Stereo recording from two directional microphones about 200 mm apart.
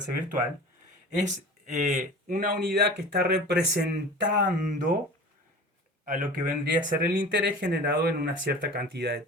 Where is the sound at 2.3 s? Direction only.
50° right (ahead or behind).